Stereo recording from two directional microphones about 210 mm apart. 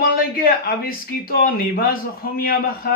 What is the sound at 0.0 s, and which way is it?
Speech, 45° left (ahead or behind).